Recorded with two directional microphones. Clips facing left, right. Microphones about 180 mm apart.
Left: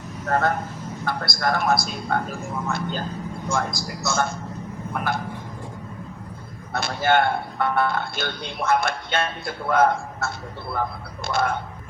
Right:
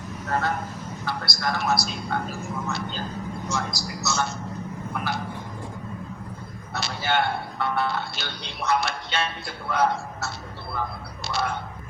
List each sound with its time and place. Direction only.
0.3 s speech: 50° left (ahead or behind)
6.7 s speech: 50° left (ahead or behind)